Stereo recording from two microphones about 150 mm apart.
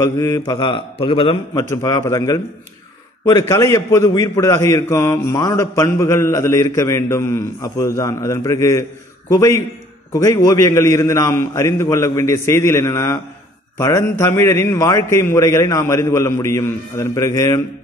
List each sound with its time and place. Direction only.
0.0 s mantra: 15° left (ahead or behind)
0.5 s a man's voice: 30° left (ahead or behind)
1.5 s a man's voice: 20° left (ahead or behind)